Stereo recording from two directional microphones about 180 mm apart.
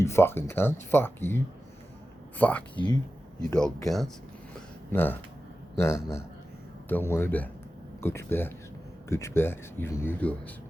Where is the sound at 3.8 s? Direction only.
Centre (ahead or behind).